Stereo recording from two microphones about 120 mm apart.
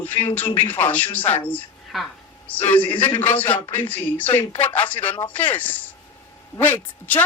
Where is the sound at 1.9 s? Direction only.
Centre (ahead or behind).